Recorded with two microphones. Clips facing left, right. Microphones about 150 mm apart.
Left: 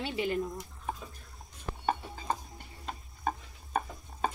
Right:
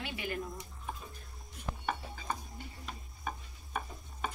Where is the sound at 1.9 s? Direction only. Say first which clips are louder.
Left 6 dB; 35° left (ahead or behind).